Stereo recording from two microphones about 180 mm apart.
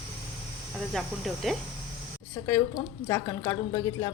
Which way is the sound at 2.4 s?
15° left (ahead or behind).